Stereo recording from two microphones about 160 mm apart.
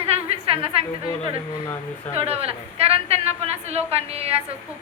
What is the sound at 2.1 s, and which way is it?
A woman's voice, 40° right (ahead or behind).